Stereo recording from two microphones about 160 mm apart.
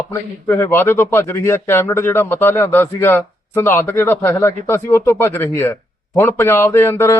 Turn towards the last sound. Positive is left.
turn(degrees=15)  # may be behind; listen again after turning